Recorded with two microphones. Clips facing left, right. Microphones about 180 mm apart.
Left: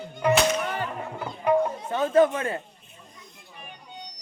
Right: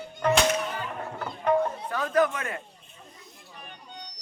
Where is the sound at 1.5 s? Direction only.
10° left (ahead or behind).